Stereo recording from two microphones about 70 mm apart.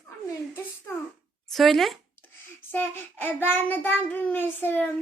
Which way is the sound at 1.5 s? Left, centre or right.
Centre.